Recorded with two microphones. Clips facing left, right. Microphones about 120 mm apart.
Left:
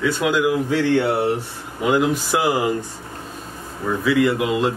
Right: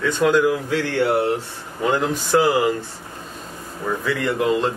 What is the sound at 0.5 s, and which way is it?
Speech, 20° left (ahead or behind).